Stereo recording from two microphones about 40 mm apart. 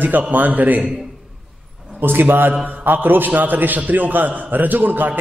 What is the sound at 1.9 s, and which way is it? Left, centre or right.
A man's voice, right.